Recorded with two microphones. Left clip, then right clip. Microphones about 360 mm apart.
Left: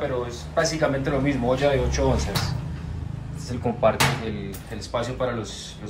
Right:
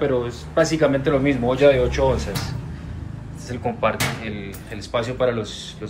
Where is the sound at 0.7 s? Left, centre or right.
Left.